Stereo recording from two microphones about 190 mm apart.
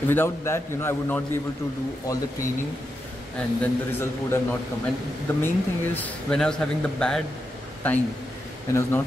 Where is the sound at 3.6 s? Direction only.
10° left (ahead or behind).